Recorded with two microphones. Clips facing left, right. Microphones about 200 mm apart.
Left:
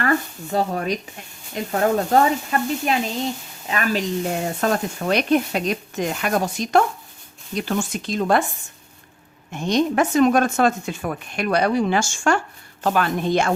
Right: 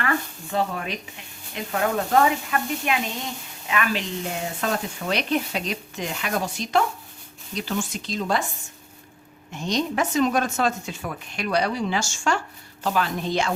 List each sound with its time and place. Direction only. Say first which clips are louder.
0.0 s a woman's voice: left 5 dB; 40° left (ahead or behind); by 8.4 s 55° left (ahead or behind)
9.5 s speech: left 5 dB; 55° left (ahead or behind)